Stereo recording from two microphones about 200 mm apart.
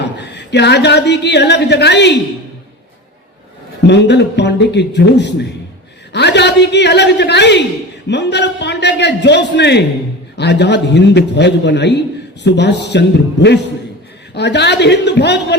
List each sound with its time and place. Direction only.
0.2 s a man's voice: 60° left (ahead or behind)
3.8 s a man's voice: 60° left (ahead or behind)